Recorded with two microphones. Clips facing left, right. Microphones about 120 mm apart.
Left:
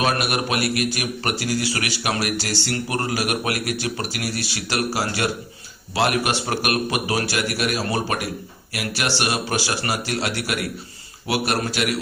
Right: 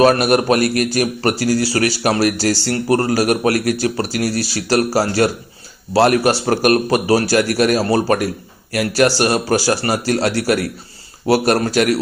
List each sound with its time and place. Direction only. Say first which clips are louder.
0.0 s a man's voice: right 10 dB; 40° right (ahead or behind)